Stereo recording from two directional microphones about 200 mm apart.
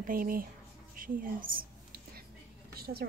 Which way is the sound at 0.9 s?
45° right (ahead or behind).